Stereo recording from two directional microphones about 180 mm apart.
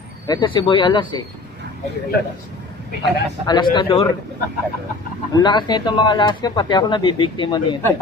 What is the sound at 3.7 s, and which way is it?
Speech, 30° left (ahead or behind).